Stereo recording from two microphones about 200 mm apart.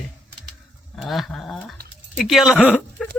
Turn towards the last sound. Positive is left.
turn(degrees=0)  # may be behind; listen again after turning